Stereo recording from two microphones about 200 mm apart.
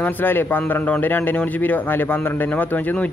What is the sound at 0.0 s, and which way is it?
A man's voice, 10° left (ahead or behind).